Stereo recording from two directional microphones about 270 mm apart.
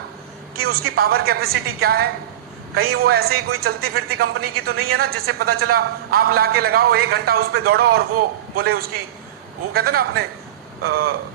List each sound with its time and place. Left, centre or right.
0.7 s a man's voice: right